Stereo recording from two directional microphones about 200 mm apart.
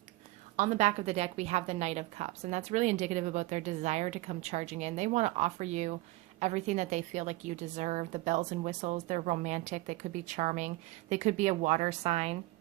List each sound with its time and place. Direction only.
0.5 s a woman's voice: 35° right (ahead or behind)